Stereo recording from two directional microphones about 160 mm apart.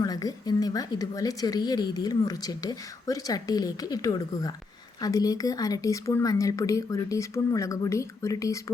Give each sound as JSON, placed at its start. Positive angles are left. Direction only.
{"t": 0.0, "sound": "a woman's voice", "side_deg": 25}